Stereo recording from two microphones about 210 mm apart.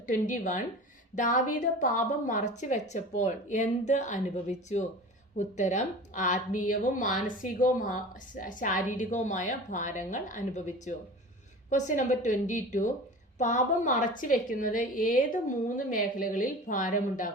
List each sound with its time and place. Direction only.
0.0 s a woman's voice: 40° left (ahead or behind)